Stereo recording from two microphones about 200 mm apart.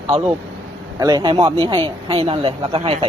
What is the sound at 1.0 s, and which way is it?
Speech, 20° right (ahead or behind).